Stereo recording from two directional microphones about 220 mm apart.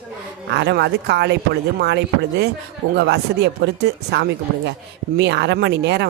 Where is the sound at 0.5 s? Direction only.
50° right (ahead or behind).